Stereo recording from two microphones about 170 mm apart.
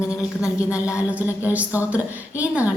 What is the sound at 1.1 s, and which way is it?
A woman's voice, 10° right (ahead or behind).